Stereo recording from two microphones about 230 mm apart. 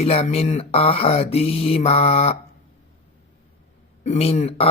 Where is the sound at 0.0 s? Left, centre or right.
Left.